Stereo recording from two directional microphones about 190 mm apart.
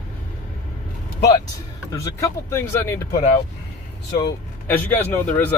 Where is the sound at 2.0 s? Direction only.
15° left (ahead or behind).